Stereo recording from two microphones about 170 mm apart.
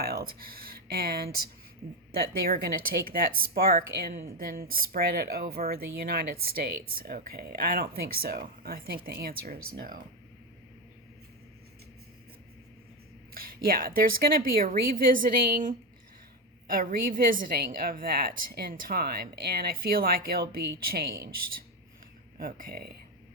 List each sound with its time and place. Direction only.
0.0 s speech: 65° right (ahead or behind)
3.0 s speech: 60° right (ahead or behind)
13.3 s speech: 60° right (ahead or behind)
22.4 s speech: 60° right (ahead or behind)